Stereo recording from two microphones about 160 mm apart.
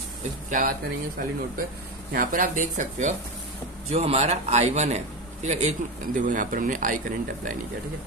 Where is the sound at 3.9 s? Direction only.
40° right (ahead or behind).